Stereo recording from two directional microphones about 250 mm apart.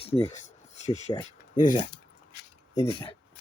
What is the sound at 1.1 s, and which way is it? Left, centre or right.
Speech, centre.